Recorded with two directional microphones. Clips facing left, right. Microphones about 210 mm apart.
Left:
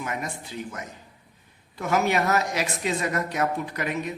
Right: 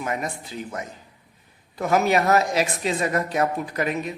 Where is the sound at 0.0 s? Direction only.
35° right (ahead or behind).